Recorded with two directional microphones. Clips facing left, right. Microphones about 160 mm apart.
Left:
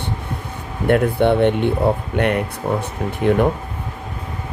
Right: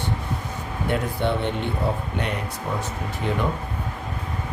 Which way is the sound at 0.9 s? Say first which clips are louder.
Left 9 dB; 60° left (ahead or behind).